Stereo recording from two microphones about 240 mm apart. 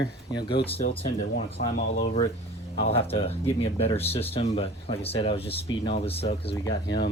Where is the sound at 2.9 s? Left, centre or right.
Left.